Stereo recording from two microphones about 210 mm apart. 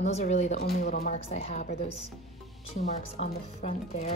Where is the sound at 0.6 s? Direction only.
50° left (ahead or behind).